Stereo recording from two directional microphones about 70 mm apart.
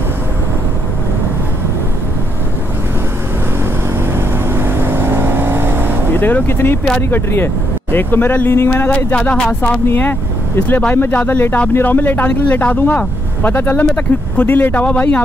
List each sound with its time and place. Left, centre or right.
4.6 s vehicle: right
6.1 s speech: left
8.9 s speech: centre
11.0 s speech: left